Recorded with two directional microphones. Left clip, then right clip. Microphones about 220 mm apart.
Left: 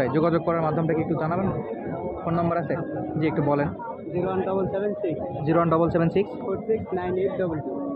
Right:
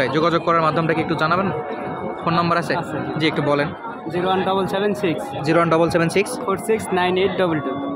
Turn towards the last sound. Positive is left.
turn(degrees=-50)  # may be behind; listen again after turning